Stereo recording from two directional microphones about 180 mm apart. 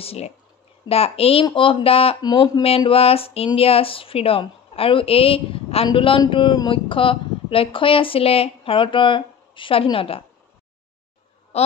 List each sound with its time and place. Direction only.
0.0 s speech: 35° left (ahead or behind)
11.5 s honk: 35° left (ahead or behind)